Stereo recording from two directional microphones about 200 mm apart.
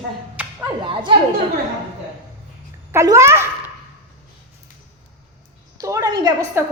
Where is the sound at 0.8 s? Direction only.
25° right (ahead or behind).